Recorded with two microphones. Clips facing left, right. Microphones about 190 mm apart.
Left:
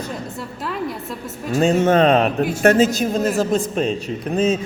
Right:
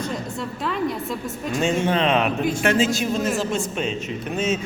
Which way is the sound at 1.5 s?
40° left (ahead or behind).